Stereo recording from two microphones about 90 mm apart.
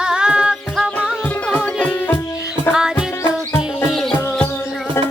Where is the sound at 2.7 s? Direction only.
5° right (ahead or behind).